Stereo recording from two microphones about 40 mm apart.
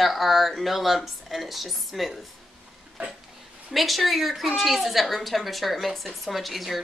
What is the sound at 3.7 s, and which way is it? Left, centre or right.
Speech, centre.